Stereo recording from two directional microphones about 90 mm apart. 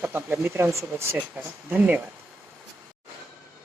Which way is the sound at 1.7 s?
20° right (ahead or behind).